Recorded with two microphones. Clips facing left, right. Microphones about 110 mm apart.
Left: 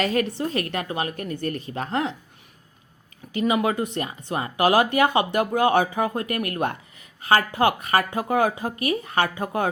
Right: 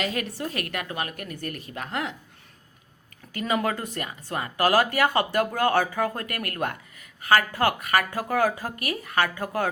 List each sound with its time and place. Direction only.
0.0 s a woman's voice: 40° left (ahead or behind)
3.3 s speech: 15° left (ahead or behind)